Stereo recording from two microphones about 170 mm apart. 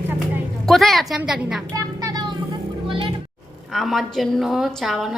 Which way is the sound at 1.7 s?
20° right (ahead or behind).